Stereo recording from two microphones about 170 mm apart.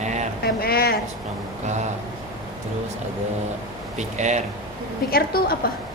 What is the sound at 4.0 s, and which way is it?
Speech, 45° right (ahead or behind).